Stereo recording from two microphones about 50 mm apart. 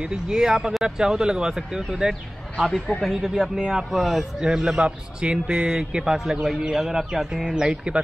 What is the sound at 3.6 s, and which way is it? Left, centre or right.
Speech, centre.